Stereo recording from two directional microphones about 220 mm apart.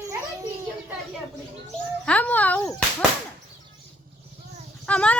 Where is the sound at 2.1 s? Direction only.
5° left (ahead or behind).